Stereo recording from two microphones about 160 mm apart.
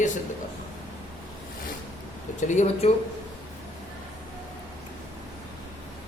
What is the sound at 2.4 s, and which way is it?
Speech, 45° left (ahead or behind).